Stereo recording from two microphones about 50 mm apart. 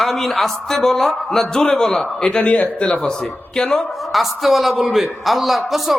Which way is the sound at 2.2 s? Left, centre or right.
Left.